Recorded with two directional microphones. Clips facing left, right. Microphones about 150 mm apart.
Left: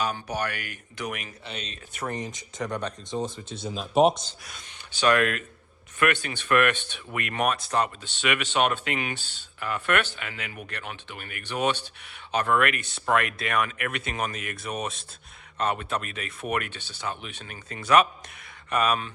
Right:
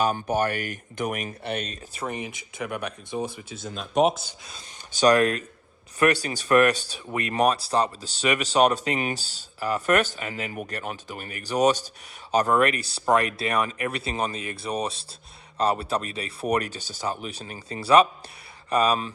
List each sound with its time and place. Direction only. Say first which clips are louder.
0.0 s speech: right 5 dB; 45° right (ahead or behind)
2.0 s speech: even; 10° right (ahead or behind)
4.9 s speech: right 4 dB; 40° right (ahead or behind)